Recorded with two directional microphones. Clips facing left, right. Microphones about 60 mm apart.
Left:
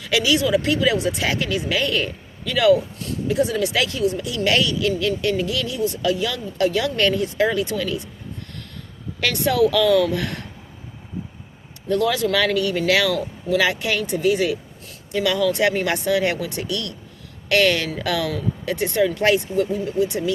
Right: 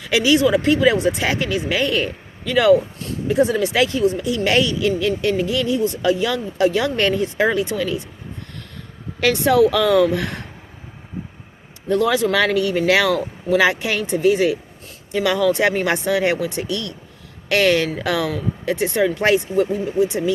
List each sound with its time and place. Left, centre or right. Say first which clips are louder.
0.1 s speech: right 3 dB; right
9.2 s speech: right 4 dB; right
11.9 s speech: right 2 dB; right